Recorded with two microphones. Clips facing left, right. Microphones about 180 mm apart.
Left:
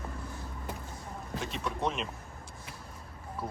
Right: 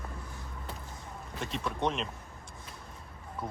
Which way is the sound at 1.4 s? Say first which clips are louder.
Right 2 dB; centre (ahead or behind).